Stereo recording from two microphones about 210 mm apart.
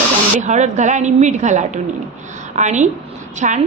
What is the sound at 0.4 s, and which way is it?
A woman's voice, 35° right (ahead or behind).